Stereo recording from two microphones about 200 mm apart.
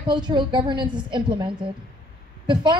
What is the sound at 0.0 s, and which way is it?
A woman's voice, 25° right (ahead or behind).